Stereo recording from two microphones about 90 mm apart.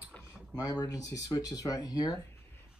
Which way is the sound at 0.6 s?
40° left (ahead or behind).